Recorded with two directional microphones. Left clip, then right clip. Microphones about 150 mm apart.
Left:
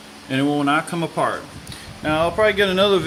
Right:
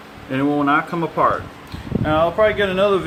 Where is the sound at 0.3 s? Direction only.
45° left (ahead or behind).